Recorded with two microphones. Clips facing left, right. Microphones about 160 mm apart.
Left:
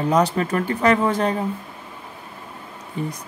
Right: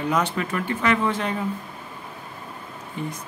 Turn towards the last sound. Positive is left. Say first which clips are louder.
# left 3 dB
turn(degrees=35)  # may be behind; listen again after turning